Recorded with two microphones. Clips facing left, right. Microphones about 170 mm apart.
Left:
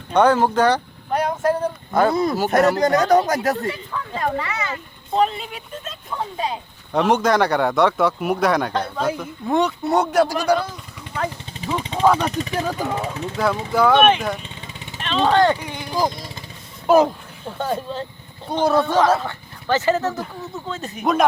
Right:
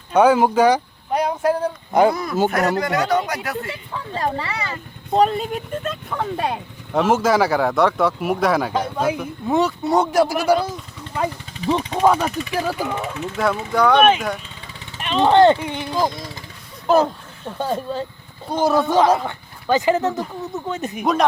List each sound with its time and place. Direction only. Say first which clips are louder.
0.1 s a sound: right 2 dB; 10° right (ahead or behind)
2.1 s speech: left 2 dB; 30° left (ahead or behind)
3.7 s speech: left 2 dB; 30° right (ahead or behind); by 6.6 s 60° right (ahead or behind)
6.9 s speech: even; centre (ahead or behind)
11.9 s speech: left 1 dB; 10° right (ahead or behind)
12.3 s speech: even; 35° left (ahead or behind)
13.3 s speech: even; centre (ahead or behind)
15.0 s speech: right 4 dB; 15° right (ahead or behind)
16.0 s vehicle: even; 25° left (ahead or behind)
16.8 s a sound: left 2 dB; 10° left (ahead or behind)
17.6 s speech: right 1 dB; 15° right (ahead or behind)
21.0 s speech: left 1 dB; centre (ahead or behind)